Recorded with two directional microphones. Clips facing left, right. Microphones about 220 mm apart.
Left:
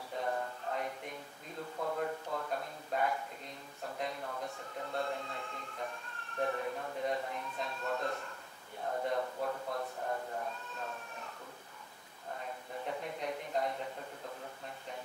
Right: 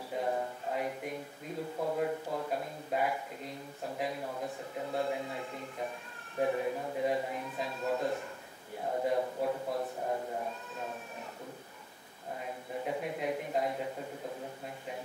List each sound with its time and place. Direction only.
0.2 s music: 10° right (ahead or behind)
1.8 s a man's voice: 15° right (ahead or behind)
4.9 s a man's voice: 10° right (ahead or behind)
6.4 s a man's voice: 10° right (ahead or behind)
12.8 s a man's voice: 5° right (ahead or behind)